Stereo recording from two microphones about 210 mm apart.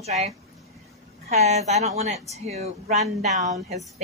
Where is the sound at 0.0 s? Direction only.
30° right (ahead or behind).